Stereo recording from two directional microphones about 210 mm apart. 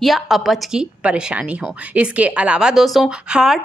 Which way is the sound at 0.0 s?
Centre (ahead or behind).